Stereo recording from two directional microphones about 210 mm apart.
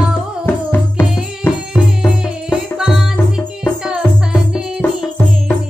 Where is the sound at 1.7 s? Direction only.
5° right (ahead or behind).